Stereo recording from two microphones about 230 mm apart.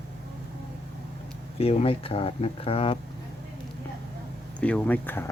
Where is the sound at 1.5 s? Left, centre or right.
Left.